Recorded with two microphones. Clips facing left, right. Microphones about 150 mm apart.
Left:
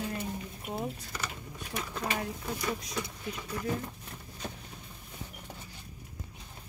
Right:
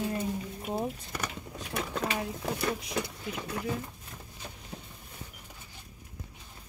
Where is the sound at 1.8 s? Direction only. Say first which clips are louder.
Right 2 dB; 65° right (ahead or behind).